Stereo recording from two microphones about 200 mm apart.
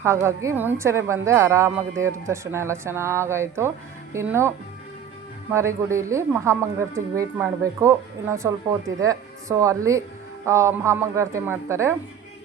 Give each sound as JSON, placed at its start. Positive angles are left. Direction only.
{"t": 0.0, "sound": "speech", "side_deg": -15}